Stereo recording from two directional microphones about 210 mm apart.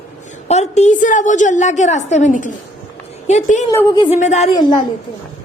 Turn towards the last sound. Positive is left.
turn(degrees=20)  # may be behind; listen again after turning